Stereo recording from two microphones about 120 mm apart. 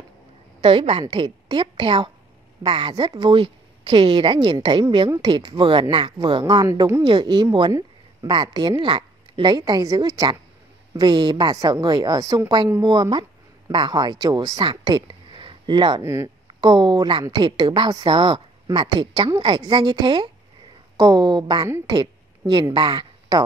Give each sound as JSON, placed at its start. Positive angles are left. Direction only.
{"t": 0.6, "sound": "a woman's voice", "side_deg": -50}
{"t": 1.0, "sound": "a woman's voice", "side_deg": -40}
{"t": 6.4, "sound": "a woman's voice", "side_deg": -30}
{"t": 7.0, "sound": "a woman's voice", "side_deg": -40}
{"t": 16.0, "sound": "a woman's voice", "side_deg": -25}
{"t": 16.6, "sound": "a woman's voice", "side_deg": -40}
{"t": 21.6, "sound": "a woman's voice", "side_deg": -20}
{"t": 22.5, "sound": "speech", "side_deg": -40}